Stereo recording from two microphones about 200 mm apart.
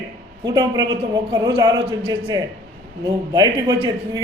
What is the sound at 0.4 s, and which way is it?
A man's voice, 20° right (ahead or behind).